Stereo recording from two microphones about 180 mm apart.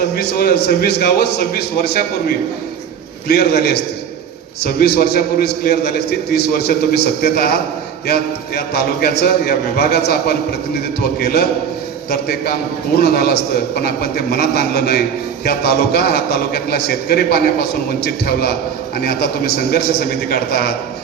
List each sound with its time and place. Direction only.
0.2 s a man's voice: 60° left (ahead or behind)